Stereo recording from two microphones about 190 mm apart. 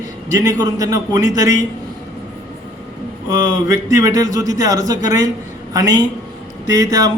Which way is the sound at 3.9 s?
15° right (ahead or behind).